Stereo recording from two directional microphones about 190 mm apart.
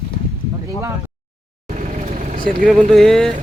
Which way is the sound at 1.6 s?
45° right (ahead or behind).